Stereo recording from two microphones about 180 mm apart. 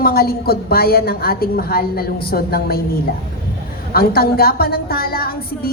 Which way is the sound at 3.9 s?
60° left (ahead or behind).